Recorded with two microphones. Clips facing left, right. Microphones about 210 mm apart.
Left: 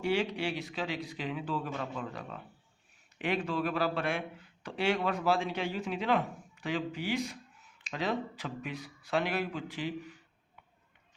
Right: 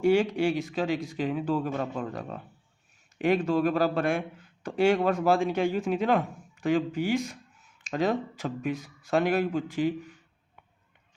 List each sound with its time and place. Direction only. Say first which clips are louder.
0.0 s speech: right 8 dB; 45° right (ahead or behind)